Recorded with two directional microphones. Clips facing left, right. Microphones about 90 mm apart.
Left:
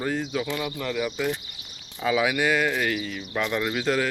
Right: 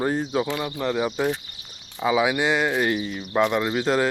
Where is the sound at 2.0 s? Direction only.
20° right (ahead or behind).